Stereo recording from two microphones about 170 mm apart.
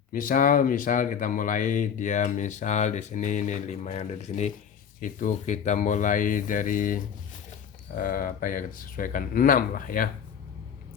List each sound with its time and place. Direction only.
0.1 s speech: 55° left (ahead or behind)